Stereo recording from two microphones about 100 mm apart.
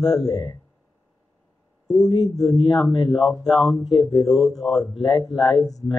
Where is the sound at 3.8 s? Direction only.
45° left (ahead or behind).